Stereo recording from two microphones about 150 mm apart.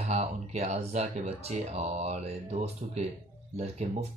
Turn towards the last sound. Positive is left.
turn(degrees=-45)  # may be behind; listen again after turning